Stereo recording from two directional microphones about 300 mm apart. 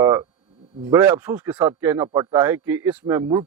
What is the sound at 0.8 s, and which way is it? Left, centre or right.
A man's voice, centre.